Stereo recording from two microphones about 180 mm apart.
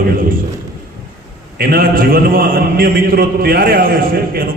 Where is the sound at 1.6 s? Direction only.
55° right (ahead or behind).